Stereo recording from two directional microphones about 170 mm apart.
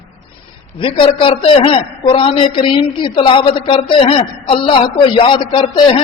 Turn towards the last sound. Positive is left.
turn(degrees=30)  # may be behind; listen again after turning